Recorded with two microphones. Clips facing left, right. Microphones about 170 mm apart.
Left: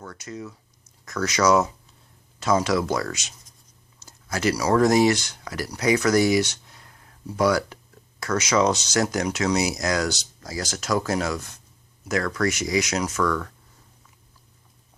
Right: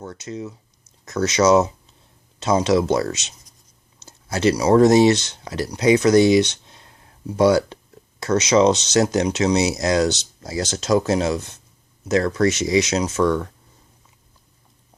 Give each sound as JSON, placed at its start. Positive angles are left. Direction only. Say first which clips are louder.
{"t": 0.0, "sound": "speech", "louder": "right 5 dB", "side_deg": -25}